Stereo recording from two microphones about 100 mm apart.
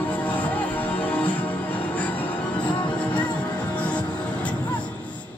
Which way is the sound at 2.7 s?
50° left (ahead or behind).